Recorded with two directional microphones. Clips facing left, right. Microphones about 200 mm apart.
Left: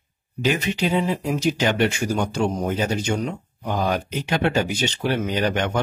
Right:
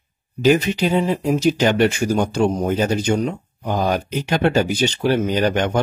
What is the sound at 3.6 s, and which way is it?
Speech, 40° right (ahead or behind).